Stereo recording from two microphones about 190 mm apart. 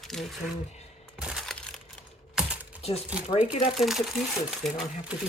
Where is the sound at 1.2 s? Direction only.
Centre (ahead or behind).